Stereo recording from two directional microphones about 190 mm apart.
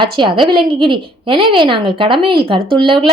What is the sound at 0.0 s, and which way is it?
A woman's voice, 25° right (ahead or behind).